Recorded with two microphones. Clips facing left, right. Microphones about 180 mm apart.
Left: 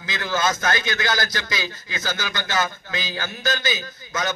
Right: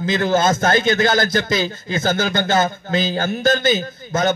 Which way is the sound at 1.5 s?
25° right (ahead or behind).